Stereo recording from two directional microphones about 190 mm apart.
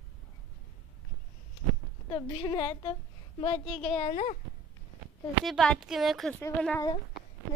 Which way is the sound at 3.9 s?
35° left (ahead or behind).